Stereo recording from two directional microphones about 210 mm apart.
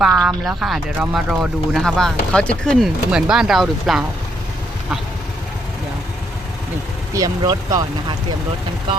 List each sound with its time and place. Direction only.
0.0 s speech: centre (ahead or behind)
7.1 s speech: 15° right (ahead or behind)